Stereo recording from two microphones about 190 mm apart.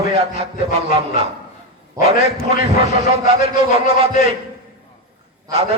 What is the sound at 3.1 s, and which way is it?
A man's voice, 30° right (ahead or behind).